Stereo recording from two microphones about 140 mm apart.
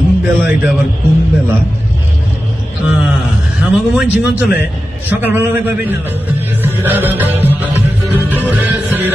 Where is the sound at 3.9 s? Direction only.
10° right (ahead or behind).